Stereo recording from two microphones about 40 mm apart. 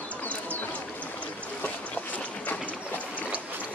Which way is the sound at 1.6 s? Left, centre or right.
Left.